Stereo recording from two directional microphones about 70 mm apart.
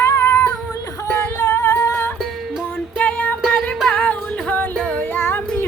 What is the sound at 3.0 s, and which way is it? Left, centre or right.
Music, left.